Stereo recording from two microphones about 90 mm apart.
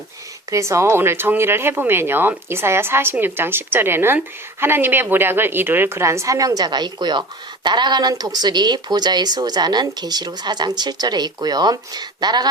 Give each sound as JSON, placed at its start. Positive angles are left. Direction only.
{"t": 0.5, "sound": "a woman's voice", "side_deg": -35}